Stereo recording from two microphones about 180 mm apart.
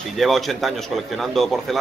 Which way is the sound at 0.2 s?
Centre (ahead or behind).